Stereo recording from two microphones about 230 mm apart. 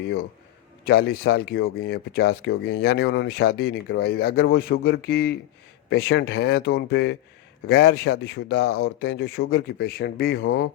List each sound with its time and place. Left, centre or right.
0.9 s speech: left